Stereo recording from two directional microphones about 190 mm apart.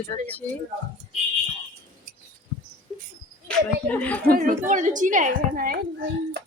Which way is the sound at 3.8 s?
10° left (ahead or behind).